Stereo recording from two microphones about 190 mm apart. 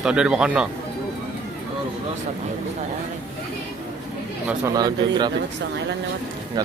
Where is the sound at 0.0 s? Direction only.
5° right (ahead or behind).